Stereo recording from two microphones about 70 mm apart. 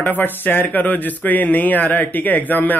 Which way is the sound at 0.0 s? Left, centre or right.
Left.